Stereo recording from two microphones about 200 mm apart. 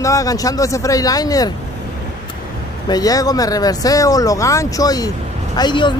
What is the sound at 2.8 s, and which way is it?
Speech, 20° left (ahead or behind).